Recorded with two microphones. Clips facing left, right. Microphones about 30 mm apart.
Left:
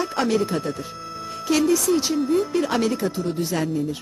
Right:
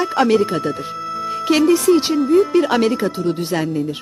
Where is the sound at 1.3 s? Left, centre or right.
Right.